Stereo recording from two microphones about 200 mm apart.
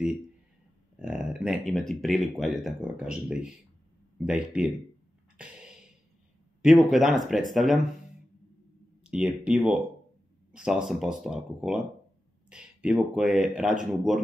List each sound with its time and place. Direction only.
1.0 s speech: 5° right (ahead or behind)
5.4 s music: 5° right (ahead or behind)
6.6 s speech: centre (ahead or behind)
9.0 s speech: 5° right (ahead or behind)